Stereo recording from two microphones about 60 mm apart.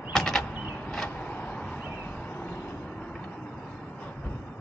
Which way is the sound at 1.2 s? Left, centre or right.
Left.